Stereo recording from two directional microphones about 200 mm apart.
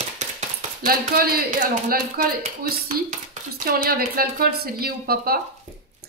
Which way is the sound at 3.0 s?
45° right (ahead or behind).